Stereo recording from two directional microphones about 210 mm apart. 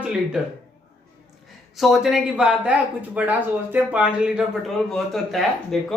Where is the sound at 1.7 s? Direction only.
Centre (ahead or behind).